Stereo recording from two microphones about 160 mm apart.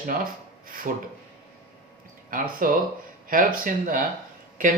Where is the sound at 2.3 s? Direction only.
60° right (ahead or behind).